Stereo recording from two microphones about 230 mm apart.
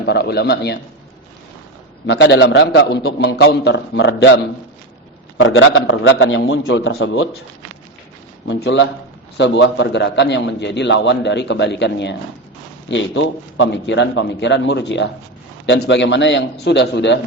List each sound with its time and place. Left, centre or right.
0.0 s a man's voice: left
2.0 s a man's voice: left
5.4 s a man's voice: left
8.4 s a man's voice: left